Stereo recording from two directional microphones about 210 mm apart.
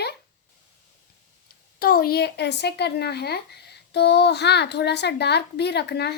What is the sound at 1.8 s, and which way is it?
A child's voice, 45° left (ahead or behind).